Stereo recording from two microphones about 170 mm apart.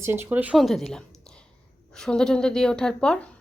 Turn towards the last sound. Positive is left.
turn(degrees=5)  # may be behind; listen again after turning